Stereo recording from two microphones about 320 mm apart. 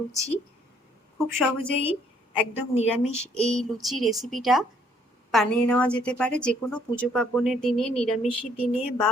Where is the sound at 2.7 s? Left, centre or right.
Centre.